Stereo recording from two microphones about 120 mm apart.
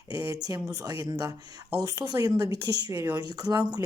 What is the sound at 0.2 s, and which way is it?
Speech, 30° right (ahead or behind).